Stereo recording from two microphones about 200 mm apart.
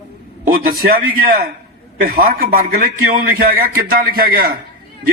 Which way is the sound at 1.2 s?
45° right (ahead or behind).